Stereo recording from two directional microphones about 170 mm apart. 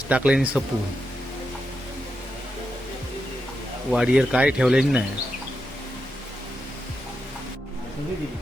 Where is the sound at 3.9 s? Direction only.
5° right (ahead or behind).